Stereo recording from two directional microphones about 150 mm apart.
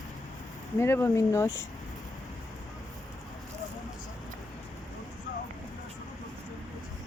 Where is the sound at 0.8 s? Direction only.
15° left (ahead or behind).